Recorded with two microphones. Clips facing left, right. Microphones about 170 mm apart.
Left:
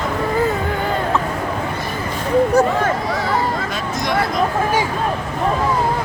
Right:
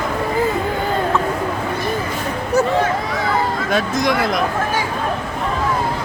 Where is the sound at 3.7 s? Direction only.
85° right.